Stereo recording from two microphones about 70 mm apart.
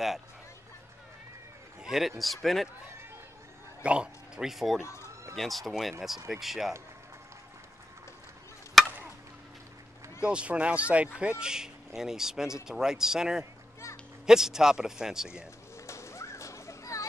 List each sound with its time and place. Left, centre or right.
1.8 s a man's voice: centre
3.8 s a man's voice: centre
8.8 s chop: centre
10.2 s speech: centre
15.9 s a sound: left